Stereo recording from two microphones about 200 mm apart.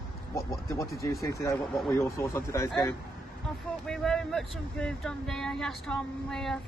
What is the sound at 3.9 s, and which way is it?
Speech, centre (ahead or behind).